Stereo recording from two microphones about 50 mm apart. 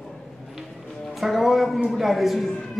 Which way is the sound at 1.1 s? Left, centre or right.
Centre.